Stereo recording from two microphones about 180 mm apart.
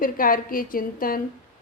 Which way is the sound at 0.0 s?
50° left (ahead or behind).